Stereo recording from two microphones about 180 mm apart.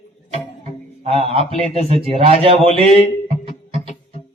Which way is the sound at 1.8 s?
30° right (ahead or behind).